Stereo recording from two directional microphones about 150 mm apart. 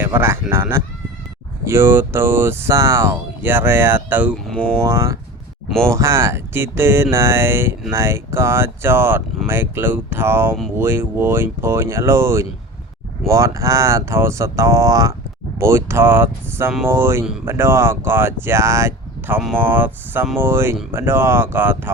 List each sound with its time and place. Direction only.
0.0 s speech: 15° right (ahead or behind)
4.4 s speech: 5° left (ahead or behind)
4.8 s speech: 20° right (ahead or behind)